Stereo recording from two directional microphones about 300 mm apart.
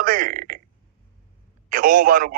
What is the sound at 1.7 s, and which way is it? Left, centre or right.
Speech, right.